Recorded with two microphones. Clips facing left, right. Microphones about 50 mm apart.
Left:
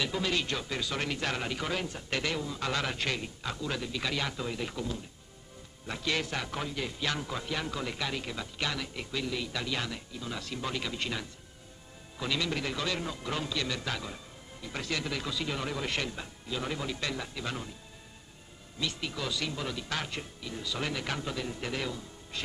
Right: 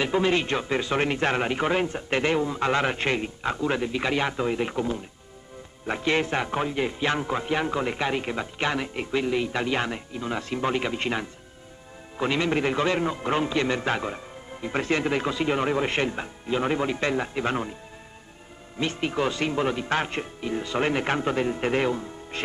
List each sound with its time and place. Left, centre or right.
0.0 s a man's voice: right
18.8 s a man's voice: right